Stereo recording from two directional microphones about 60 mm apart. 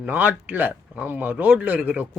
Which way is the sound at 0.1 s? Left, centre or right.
Right.